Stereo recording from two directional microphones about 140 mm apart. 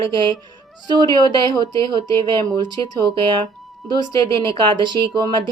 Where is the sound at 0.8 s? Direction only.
30° right (ahead or behind).